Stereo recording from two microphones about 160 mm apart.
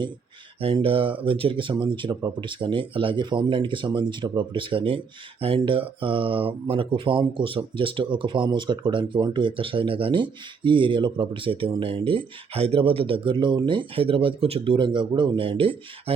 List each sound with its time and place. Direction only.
0.6 s speech: 35° right (ahead or behind)